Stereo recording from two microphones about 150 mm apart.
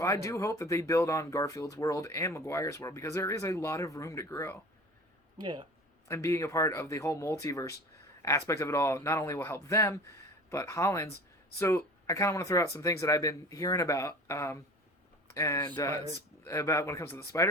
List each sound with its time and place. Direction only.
0.0 s speech: 20° left (ahead or behind)
5.4 s speech: 30° right (ahead or behind)
6.1 s speech: 20° left (ahead or behind)